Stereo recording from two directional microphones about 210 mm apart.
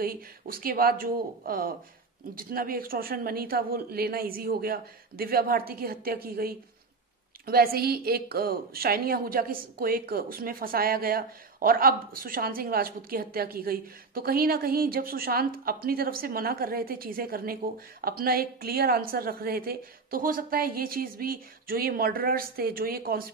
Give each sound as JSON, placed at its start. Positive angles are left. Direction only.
{"t": 0.0, "sound": "a woman's voice", "side_deg": -45}